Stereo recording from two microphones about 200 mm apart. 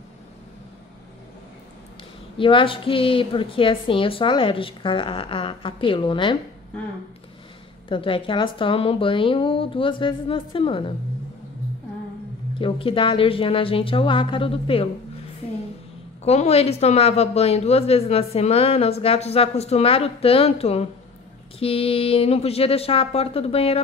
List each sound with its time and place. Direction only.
2.3 s a woman's voice: 25° left (ahead or behind)
7.9 s a woman's voice: 25° left (ahead or behind)
12.5 s a woman's voice: 25° left (ahead or behind)
16.3 s a woman's voice: 30° left (ahead or behind)